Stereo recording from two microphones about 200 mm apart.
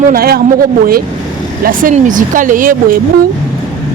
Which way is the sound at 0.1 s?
50° right (ahead or behind).